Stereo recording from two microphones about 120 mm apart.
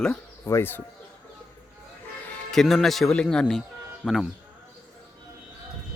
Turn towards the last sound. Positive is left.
turn(degrees=-5)  # may be behind; listen again after turning